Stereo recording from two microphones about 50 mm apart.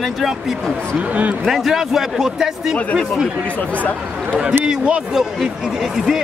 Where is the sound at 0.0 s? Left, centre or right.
Centre.